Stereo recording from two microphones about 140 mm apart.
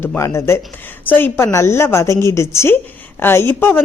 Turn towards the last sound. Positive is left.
turn(degrees=15)  # may be behind; listen again after turning